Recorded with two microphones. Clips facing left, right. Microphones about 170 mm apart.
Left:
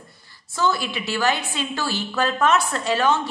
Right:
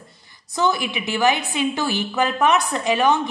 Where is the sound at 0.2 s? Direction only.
20° right (ahead or behind).